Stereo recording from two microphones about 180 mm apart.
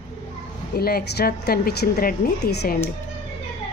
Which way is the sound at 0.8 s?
60° left (ahead or behind).